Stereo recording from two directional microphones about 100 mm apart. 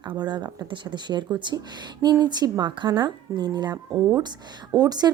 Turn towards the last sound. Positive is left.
turn(degrees=-40)  # may be behind; listen again after turning